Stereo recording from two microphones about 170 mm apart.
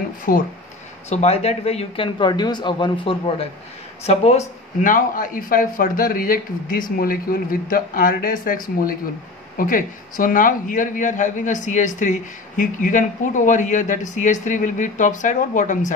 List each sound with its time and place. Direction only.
0.3 s speech: 55° left (ahead or behind)
1.0 s a man's voice: 40° left (ahead or behind)